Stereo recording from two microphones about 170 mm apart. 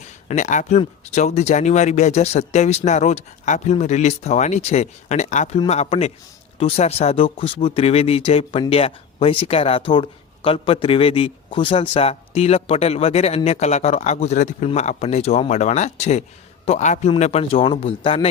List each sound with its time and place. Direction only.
0.3 s speech: 45° left (ahead or behind)